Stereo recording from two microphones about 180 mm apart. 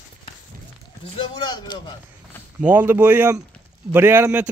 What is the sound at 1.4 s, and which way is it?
Speech, 25° left (ahead or behind).